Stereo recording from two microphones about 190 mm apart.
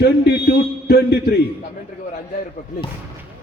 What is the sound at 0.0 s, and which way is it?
A man's voice, 60° left (ahead or behind).